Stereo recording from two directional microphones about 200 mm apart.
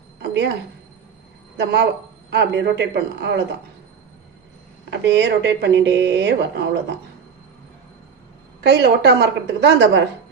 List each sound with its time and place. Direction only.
0.2 s a sound: 60° right (ahead or behind)
1.5 s speech: 55° right (ahead or behind)
4.9 s speech: 60° right (ahead or behind)
8.6 s speech: 55° right (ahead or behind)